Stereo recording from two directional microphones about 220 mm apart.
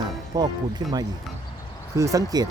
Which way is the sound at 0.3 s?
20° right (ahead or behind).